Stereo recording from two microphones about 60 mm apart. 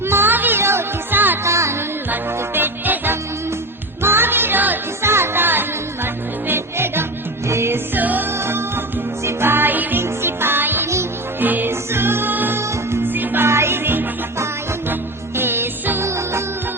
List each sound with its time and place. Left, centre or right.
0.1 s music: right
0.6 s music: right
1.1 s music: right
1.5 s music: right
2.6 s music: right
5.1 s music: right
7.9 s music: right
8.4 s music: right
12.5 s music: right
15.4 s music: right